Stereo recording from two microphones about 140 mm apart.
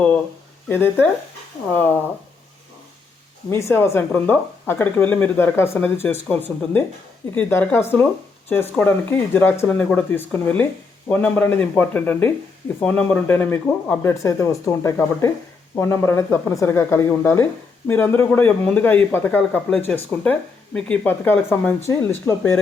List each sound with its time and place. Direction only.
0.7 s speech: 15° left (ahead or behind)
3.5 s speech: 20° left (ahead or behind)
14.1 s speech: 20° left (ahead or behind)